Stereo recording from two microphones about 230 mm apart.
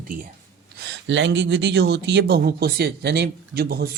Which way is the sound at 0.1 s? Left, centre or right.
Right.